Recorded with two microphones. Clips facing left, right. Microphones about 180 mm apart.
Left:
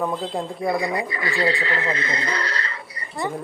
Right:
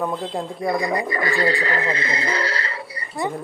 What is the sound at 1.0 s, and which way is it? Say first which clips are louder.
Speech: right 2 dB; 45° right (ahead or behind).